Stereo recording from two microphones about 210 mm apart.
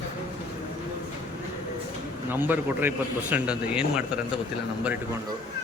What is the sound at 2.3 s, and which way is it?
A man's voice, 10° right (ahead or behind).